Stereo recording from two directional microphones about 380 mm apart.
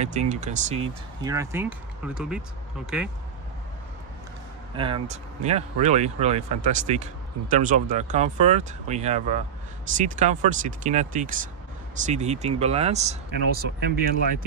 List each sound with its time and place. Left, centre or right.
0.0 s speech: centre
4.7 s speech: centre